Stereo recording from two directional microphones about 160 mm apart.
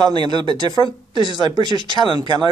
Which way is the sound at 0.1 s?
30° right (ahead or behind).